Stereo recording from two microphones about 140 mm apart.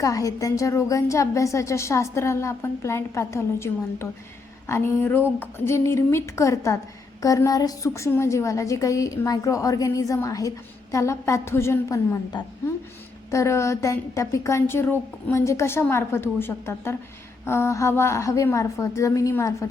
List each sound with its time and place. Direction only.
0.0 s a woman's voice: 25° left (ahead or behind)